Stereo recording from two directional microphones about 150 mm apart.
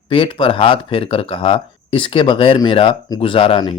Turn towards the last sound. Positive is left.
turn(degrees=30)  # may be behind; listen again after turning